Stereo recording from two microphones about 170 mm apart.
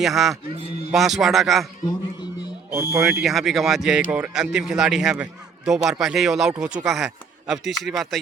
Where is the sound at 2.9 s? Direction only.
15° right (ahead or behind).